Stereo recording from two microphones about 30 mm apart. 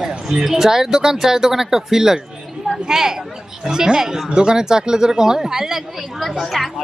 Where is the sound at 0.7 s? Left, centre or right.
Centre.